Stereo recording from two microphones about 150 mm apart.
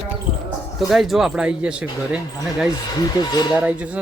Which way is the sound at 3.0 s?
25° left (ahead or behind).